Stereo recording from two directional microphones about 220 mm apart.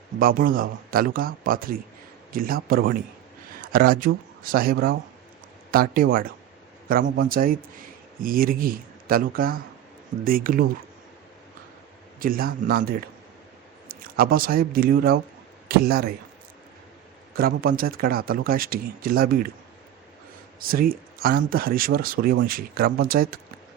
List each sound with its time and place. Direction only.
0.2 s speech: 40° right (ahead or behind)
12.2 s a man's voice: 40° right (ahead or behind)
17.3 s speech: 40° right (ahead or behind)
20.6 s speech: 40° right (ahead or behind)